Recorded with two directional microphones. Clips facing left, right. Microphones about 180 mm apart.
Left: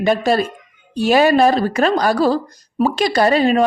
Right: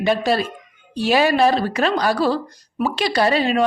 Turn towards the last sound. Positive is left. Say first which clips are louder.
# left 4 dB
turn(degrees=45)  # may be behind; listen again after turning